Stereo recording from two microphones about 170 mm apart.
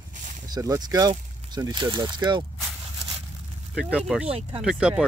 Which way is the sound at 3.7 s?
5° right (ahead or behind).